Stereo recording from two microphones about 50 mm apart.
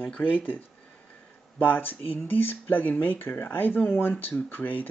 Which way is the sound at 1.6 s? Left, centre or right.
Left.